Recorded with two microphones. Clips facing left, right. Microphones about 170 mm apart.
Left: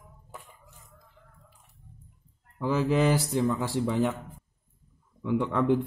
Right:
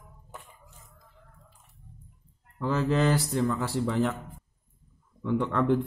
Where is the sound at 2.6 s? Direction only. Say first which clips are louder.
Left 1 dB; 10° left (ahead or behind).